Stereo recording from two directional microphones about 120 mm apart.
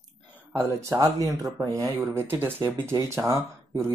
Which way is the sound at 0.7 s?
25° right (ahead or behind).